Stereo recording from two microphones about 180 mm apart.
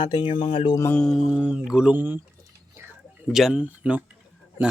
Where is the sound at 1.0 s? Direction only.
Centre (ahead or behind).